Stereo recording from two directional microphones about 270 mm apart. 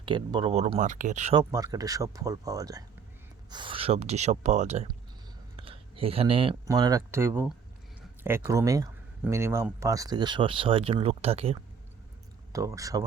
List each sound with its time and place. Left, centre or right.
0.0 s speech: centre
12.5 s speech: centre